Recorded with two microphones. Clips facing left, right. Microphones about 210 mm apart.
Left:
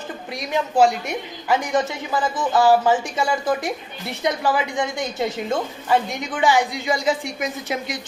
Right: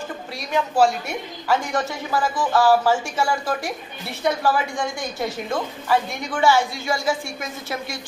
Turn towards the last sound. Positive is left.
turn(degrees=20)  # may be behind; listen again after turning